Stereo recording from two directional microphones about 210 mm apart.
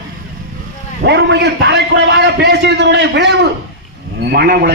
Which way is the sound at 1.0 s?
55° right (ahead or behind).